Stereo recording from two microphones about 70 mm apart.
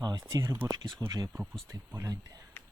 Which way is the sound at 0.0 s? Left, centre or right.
Right.